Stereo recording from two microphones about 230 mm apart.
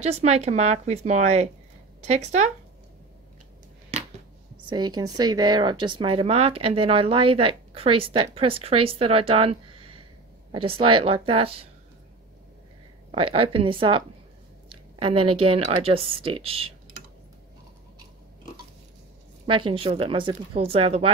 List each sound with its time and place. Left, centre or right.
0.0 s speech: right
4.6 s speech: centre
13.1 s speech: right
15.2 s speech: right
15.5 s speech: right
19.4 s speech: right